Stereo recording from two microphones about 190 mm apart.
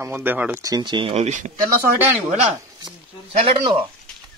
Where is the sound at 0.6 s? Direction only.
20° right (ahead or behind); by 1.5 s 40° right (ahead or behind).